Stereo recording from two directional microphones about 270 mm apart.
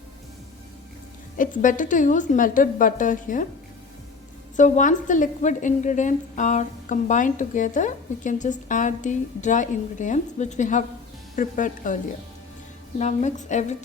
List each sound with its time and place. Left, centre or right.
1.4 s a woman's voice: left
4.5 s a woman's voice: left
13.0 s a woman's voice: left